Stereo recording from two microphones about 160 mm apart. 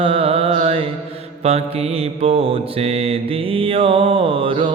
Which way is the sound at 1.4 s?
40° right (ahead or behind).